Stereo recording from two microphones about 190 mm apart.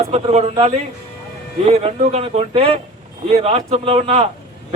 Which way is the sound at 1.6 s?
35° right (ahead or behind).